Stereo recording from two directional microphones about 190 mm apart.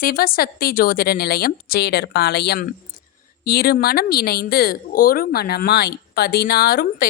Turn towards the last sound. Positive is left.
turn(degrees=55)  # may be behind; listen again after turning